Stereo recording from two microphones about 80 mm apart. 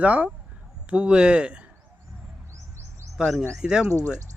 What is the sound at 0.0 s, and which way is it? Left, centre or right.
Speech, centre.